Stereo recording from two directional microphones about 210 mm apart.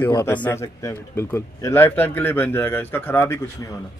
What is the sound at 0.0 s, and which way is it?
A man's voice, 10° left (ahead or behind).